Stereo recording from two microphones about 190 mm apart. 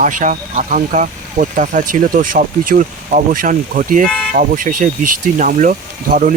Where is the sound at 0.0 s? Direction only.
40° right (ahead or behind).